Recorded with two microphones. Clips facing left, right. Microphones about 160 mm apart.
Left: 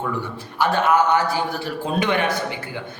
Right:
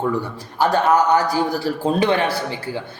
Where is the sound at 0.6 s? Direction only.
40° right (ahead or behind).